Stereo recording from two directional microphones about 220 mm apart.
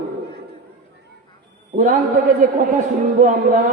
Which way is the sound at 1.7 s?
35° right (ahead or behind).